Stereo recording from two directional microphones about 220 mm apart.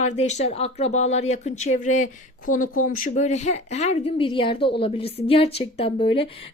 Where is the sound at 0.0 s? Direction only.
30° left (ahead or behind).